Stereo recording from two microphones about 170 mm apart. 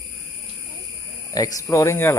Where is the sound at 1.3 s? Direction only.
20° left (ahead or behind).